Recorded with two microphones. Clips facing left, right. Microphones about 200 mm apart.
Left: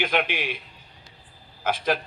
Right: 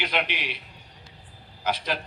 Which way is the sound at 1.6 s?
50° left (ahead or behind).